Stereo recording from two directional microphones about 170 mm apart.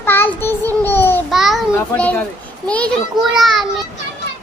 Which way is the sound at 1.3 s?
Centre (ahead or behind).